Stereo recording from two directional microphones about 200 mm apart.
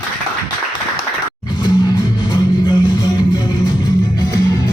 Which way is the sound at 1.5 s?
20° left (ahead or behind).